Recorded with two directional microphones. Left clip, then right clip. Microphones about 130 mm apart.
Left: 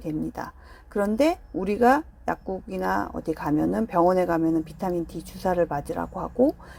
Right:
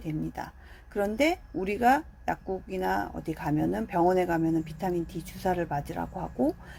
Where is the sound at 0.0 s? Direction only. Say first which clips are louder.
Left 4 dB; 35° left (ahead or behind).